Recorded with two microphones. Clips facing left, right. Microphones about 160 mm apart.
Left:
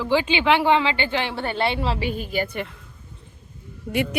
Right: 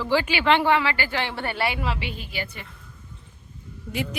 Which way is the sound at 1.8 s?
35° left (ahead or behind).